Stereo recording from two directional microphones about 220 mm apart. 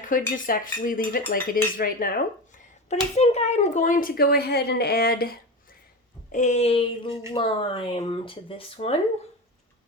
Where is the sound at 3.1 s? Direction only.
30° left (ahead or behind).